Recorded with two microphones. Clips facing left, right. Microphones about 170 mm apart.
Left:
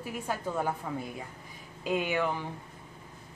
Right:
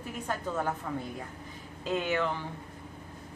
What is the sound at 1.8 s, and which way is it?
Speech, 10° left (ahead or behind).